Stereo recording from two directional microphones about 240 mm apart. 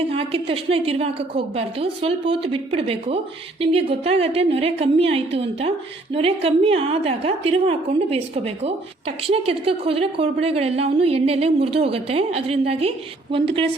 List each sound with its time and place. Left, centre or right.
0.1 s a woman's voice: right